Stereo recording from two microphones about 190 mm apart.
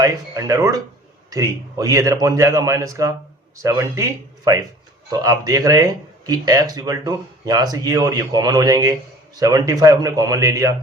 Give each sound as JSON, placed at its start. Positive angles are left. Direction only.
{"t": 0.0, "sound": "a man's voice", "side_deg": -15}